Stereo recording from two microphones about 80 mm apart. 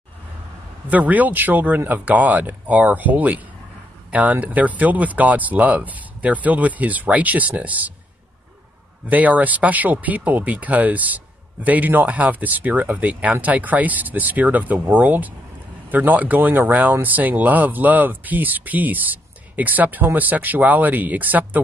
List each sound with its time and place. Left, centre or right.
0.8 s speech: right
9.0 s speech: centre